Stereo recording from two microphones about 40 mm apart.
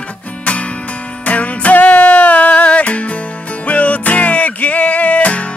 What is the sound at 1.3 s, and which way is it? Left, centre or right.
Music, left.